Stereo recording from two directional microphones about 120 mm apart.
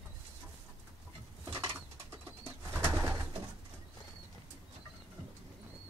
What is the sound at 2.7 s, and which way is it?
Bird, 25° right (ahead or behind).